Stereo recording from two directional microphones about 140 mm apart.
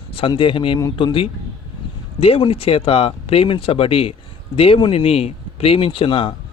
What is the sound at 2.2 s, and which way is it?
A man's voice, 45° left (ahead or behind).